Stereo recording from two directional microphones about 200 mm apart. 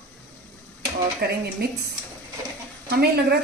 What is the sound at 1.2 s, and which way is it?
Speech, 50° right (ahead or behind).